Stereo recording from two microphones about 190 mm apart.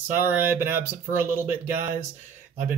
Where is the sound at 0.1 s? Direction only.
10° right (ahead or behind).